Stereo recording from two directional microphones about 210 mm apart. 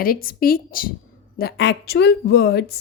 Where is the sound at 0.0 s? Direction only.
45° left (ahead or behind).